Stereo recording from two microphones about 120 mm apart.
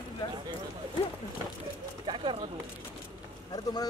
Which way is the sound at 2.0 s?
45° right (ahead or behind).